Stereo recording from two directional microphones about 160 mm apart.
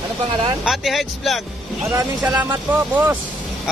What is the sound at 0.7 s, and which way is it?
Speech, centre (ahead or behind).